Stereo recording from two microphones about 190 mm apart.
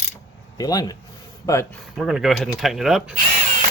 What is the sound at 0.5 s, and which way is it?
Speech, 20° left (ahead or behind).